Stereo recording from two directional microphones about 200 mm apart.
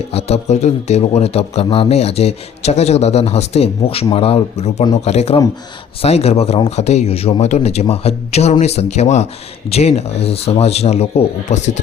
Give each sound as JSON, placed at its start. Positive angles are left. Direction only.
{"t": 0.1, "sound": "speech", "side_deg": 30}